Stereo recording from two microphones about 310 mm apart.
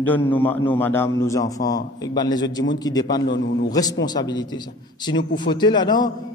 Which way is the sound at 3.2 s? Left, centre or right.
Left.